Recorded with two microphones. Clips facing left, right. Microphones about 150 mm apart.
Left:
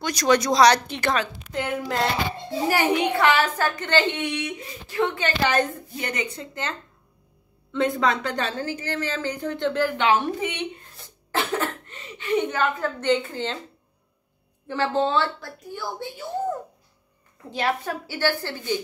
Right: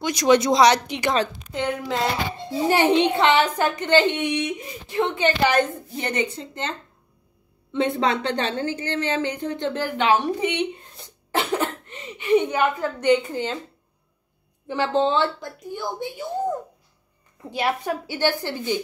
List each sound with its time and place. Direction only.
0.0 s a woman's voice: 20° right (ahead or behind)
1.5 s speech: centre (ahead or behind)
2.7 s a woman's voice: 25° right (ahead or behind)
7.7 s a woman's voice: 25° right (ahead or behind)
11.0 s a sound: 20° right (ahead or behind)
14.7 s a woman's voice: 20° right (ahead or behind)